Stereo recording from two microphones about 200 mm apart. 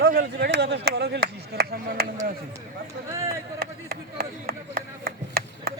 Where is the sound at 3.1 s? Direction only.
15° right (ahead or behind).